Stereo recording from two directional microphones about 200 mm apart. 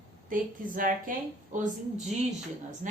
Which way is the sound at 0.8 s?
45° right (ahead or behind).